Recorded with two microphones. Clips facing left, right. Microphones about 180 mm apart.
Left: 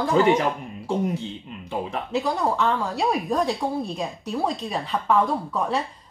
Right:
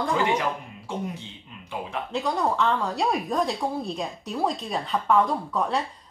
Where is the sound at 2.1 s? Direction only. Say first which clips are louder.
Left 2 dB; centre (ahead or behind).